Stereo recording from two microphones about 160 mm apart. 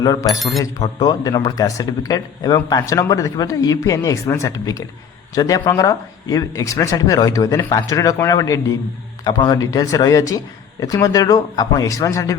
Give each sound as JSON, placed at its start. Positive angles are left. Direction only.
{"t": 0.0, "sound": "speech", "side_deg": 25}
{"t": 0.3, "sound": "speech", "side_deg": 0}
{"t": 0.9, "sound": "speech", "side_deg": 25}